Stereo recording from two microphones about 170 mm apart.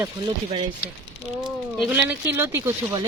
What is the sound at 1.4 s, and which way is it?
Speech, 5° right (ahead or behind).